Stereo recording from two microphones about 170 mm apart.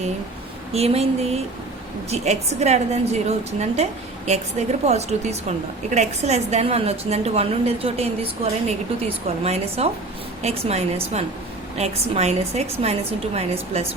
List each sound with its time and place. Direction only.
0.7 s a woman's voice: 35° right (ahead or behind)